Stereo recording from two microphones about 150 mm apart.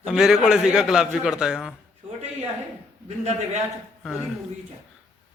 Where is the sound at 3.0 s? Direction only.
45° right (ahead or behind).